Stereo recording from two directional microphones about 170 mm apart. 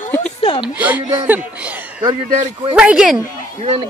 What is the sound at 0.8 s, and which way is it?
A man's voice, 10° right (ahead or behind).